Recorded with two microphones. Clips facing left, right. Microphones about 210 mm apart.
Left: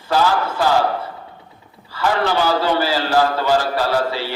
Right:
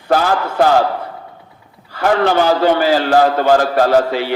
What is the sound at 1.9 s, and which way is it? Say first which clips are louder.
A man's voice: right 5 dB; 55° right (ahead or behind).